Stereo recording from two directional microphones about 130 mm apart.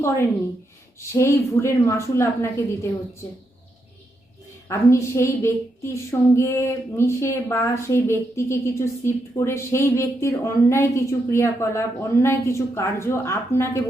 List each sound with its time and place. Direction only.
0.9 s a woman's voice: 20° left (ahead or behind)
4.7 s a woman's voice: 20° left (ahead or behind)